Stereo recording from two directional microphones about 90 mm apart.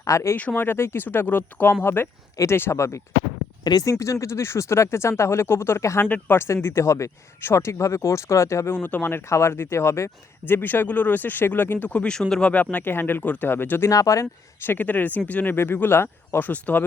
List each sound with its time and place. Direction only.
0.0 s speech: 35° left (ahead or behind)
0.3 s speech: 20° left (ahead or behind)
3.6 s speech: 50° left (ahead or behind); by 6.1 s 30° left (ahead or behind)
6.1 s speech: 20° left (ahead or behind)
13.9 s speech: 40° left (ahead or behind)
14.7 s speech: 20° left (ahead or behind)
16.5 s speech: 15° left (ahead or behind)